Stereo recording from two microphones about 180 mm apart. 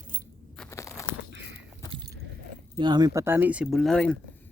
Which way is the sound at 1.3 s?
80° right.